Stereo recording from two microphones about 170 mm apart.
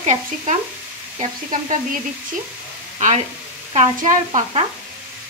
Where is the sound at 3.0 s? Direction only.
45° right (ahead or behind).